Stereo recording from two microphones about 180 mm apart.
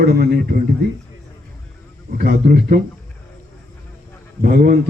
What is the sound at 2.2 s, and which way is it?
Speech, 60° right (ahead or behind).